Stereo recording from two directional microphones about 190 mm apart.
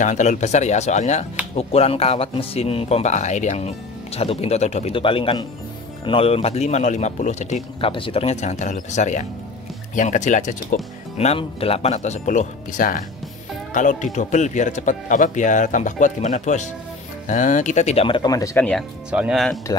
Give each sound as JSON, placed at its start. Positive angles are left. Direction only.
{"t": 0.0, "sound": "speech", "side_deg": 40}
{"t": 18.7, "sound": "speech", "side_deg": 0}